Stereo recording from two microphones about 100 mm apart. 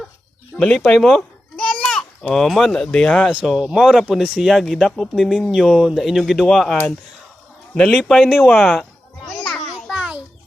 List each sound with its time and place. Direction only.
0.5 s speech: 5° left (ahead or behind)
9.3 s children playing: 10° left (ahead or behind)
9.7 s a sound: 5° right (ahead or behind)